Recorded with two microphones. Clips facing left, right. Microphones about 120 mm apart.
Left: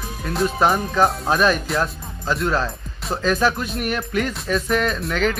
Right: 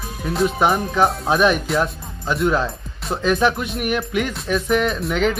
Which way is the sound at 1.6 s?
Centre (ahead or behind).